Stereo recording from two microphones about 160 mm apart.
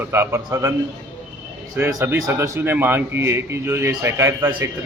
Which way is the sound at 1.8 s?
20° right (ahead or behind).